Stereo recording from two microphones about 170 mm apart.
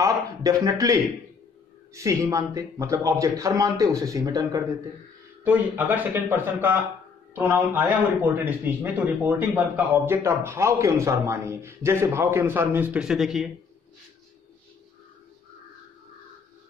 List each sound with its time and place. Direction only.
0.0 s speech: 20° right (ahead or behind)
2.0 s speech: 20° right (ahead or behind)
5.4 s speech: 10° right (ahead or behind)